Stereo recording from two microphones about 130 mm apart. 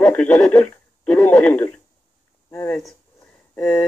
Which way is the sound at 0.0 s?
10° left (ahead or behind).